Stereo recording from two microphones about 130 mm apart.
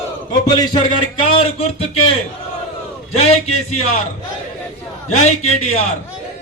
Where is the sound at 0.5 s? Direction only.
35° left (ahead or behind).